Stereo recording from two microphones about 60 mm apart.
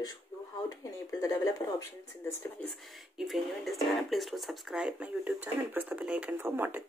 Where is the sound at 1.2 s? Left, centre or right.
Left.